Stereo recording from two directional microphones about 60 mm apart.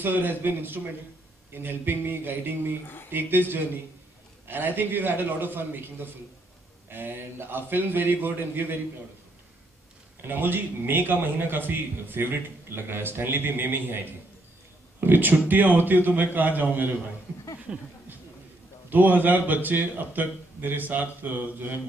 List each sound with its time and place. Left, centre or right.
0.0 s a man's voice: right
10.2 s a man's voice: right
15.0 s a man's voice: right
17.7 s speech: centre
18.9 s a man's voice: right